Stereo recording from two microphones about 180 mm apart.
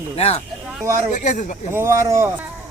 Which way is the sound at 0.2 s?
35° left (ahead or behind).